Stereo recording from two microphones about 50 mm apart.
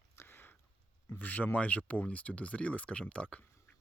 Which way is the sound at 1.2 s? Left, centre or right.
Left.